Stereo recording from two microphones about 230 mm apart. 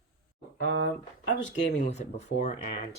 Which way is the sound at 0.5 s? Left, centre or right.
Left.